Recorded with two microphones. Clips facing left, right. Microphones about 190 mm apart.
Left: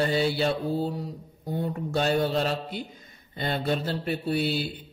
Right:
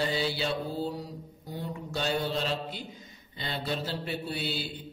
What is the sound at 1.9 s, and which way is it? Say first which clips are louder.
Speech: left 6 dB; 55° left (ahead or behind).